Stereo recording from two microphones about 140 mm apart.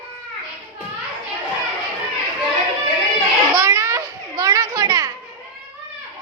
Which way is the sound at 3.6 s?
20° right (ahead or behind).